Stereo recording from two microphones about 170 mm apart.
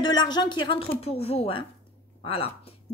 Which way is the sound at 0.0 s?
25° left (ahead or behind).